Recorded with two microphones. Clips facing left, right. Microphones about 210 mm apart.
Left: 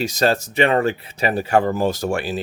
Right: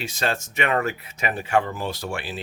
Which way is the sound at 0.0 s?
40° left (ahead or behind).